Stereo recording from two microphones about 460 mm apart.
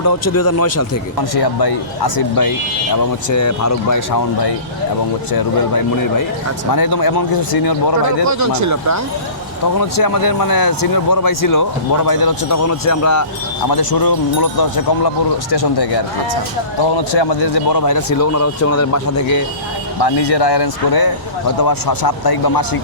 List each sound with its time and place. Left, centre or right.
0.0 s speech: left
1.4 s speech: left
5.3 s speech: left
8.2 s speech: right
9.7 s speech: left
13.7 s speech: left
20.0 s speech: left